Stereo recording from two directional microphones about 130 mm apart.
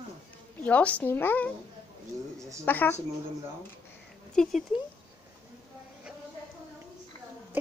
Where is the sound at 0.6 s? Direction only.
10° left (ahead or behind).